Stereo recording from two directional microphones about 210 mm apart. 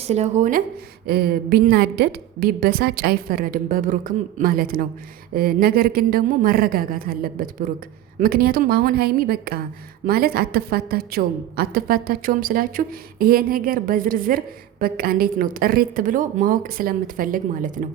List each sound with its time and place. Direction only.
0.0 s speech: 30° right (ahead or behind)
1.0 s a woman's voice: 45° right (ahead or behind)